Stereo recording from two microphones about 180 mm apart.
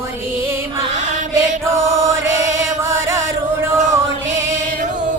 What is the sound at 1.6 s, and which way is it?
Chant, 15° right (ahead or behind).